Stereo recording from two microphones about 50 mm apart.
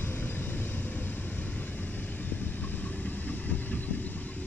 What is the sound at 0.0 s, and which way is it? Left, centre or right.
Vehicle, left.